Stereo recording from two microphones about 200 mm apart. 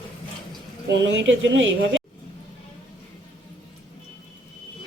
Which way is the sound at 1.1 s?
65° right (ahead or behind).